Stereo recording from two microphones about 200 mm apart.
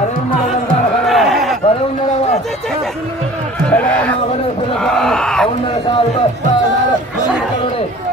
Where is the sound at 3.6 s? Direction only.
5° left (ahead or behind).